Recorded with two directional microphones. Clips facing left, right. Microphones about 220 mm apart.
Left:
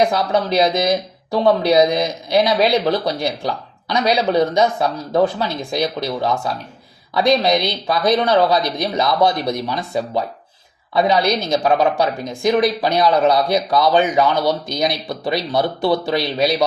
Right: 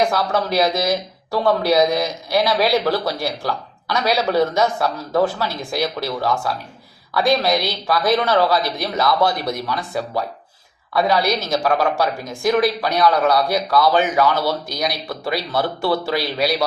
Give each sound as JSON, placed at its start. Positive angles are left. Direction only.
{"t": 0.1, "sound": "a man's voice", "side_deg": 20}
{"t": 11.3, "sound": "a woman's voice", "side_deg": -5}
{"t": 11.5, "sound": "a man's voice", "side_deg": 20}